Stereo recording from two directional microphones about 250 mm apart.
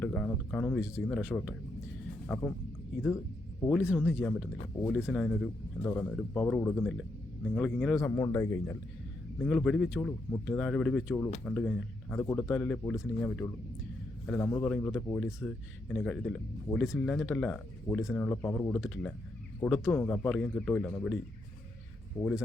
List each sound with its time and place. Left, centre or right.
0.0 s speech: centre
2.2 s speech: centre
3.8 s speech: centre
22.2 s speech: centre